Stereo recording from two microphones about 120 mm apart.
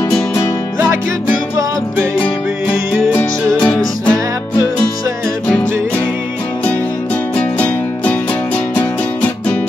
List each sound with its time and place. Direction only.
3.6 s music: 10° left (ahead or behind)
7.3 s music: 15° left (ahead or behind)